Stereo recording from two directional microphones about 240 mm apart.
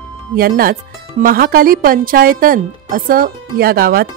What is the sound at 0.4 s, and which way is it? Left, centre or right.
A woman's voice, right.